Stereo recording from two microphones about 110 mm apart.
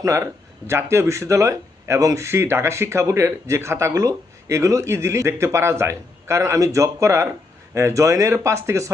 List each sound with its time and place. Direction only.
0.0 s speech: 30° right (ahead or behind)